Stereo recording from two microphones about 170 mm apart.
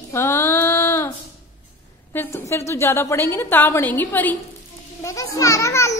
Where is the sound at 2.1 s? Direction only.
15° left (ahead or behind).